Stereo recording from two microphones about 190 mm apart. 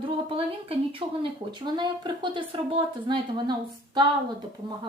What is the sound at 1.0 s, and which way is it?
Speech, 25° right (ahead or behind).